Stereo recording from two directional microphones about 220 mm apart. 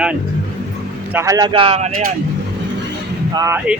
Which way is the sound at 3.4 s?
10° right (ahead or behind).